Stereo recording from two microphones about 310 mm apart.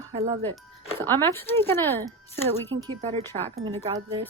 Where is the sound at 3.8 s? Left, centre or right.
Centre.